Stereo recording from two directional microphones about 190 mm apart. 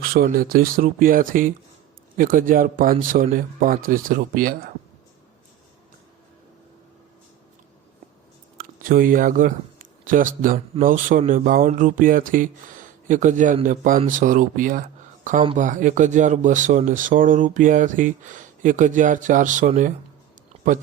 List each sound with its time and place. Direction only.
0.0 s speech: 50° right (ahead or behind)
8.5 s speech: 45° right (ahead or behind)